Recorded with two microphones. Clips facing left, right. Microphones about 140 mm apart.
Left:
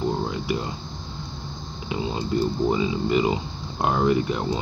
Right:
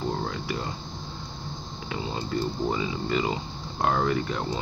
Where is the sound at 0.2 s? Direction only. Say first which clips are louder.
Left 4 dB; 15° left (ahead or behind).